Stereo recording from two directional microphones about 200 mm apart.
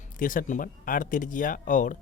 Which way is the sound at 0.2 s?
45° left (ahead or behind).